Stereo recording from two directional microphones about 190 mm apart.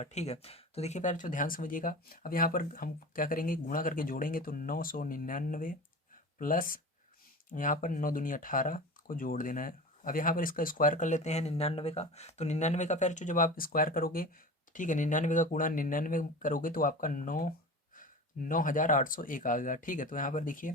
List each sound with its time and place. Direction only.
0.0 s speech: 35° left (ahead or behind)